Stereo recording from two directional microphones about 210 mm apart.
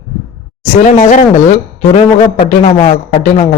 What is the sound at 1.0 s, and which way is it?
A man's voice, 35° left (ahead or behind).